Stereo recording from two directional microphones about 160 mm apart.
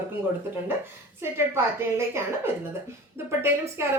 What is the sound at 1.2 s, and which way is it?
A woman's voice, 15° right (ahead or behind).